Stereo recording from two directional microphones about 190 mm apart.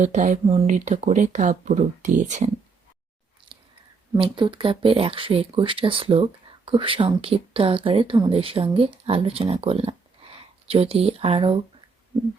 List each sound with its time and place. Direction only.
0.0 s speech: 40° right (ahead or behind)
4.1 s speech: 25° right (ahead or behind)